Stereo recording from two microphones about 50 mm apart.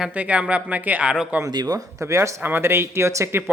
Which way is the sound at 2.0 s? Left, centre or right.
Right.